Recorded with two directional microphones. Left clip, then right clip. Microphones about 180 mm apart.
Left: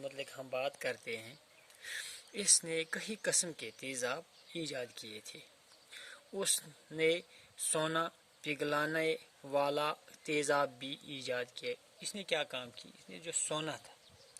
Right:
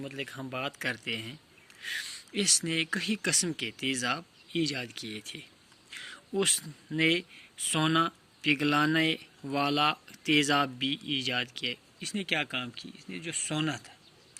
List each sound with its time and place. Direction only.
0.0 s speech: 35° left (ahead or behind)
10.8 s a man's voice: 15° right (ahead or behind)
11.2 s speech: 40° left (ahead or behind)